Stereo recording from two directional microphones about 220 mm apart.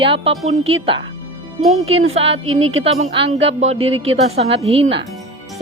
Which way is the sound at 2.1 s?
25° right (ahead or behind).